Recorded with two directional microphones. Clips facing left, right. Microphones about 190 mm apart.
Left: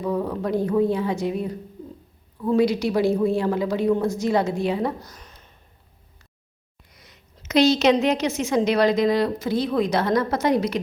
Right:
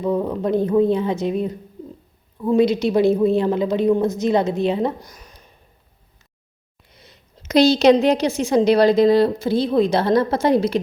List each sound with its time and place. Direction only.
0.0 s a woman's voice: 20° right (ahead or behind)
6.9 s a woman's voice: 30° right (ahead or behind)